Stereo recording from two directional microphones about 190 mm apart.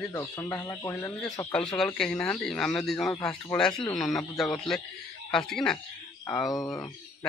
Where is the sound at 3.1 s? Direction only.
20° left (ahead or behind).